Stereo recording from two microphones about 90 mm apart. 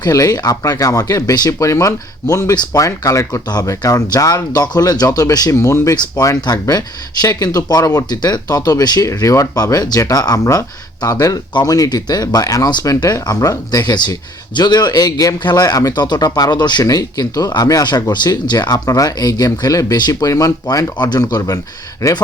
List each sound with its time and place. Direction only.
0.0 s speech: 45° left (ahead or behind)
3.4 s speech: 45° left (ahead or behind)
5.5 s speech: 30° left (ahead or behind)
6.4 s speech: 45° left (ahead or behind)